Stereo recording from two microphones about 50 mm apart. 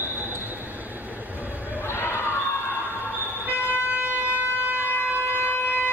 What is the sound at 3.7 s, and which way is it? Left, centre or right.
Vehicle, right.